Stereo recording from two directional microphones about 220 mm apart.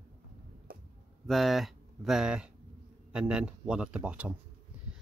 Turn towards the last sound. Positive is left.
turn(degrees=-5)  # may be behind; listen again after turning